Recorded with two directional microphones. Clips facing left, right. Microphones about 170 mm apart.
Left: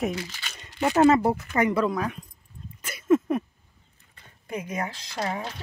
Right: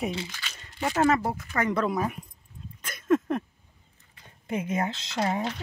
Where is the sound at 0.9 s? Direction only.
30° left (ahead or behind).